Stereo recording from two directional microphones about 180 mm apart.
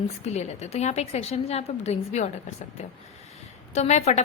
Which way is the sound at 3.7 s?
40° left (ahead or behind).